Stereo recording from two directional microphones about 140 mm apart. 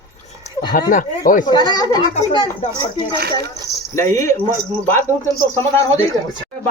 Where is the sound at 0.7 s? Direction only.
80° left.